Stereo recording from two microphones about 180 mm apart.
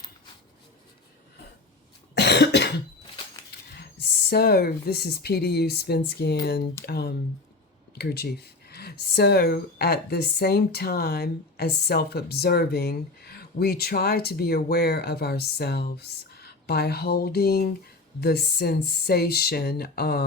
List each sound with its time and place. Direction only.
2.1 s cough: 70° left (ahead or behind)
3.8 s speech: 65° left (ahead or behind)